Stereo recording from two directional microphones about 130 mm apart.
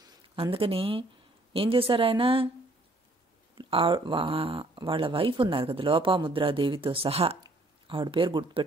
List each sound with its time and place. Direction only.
0.4 s speech: 45° right (ahead or behind)
3.5 s speech: 40° right (ahead or behind)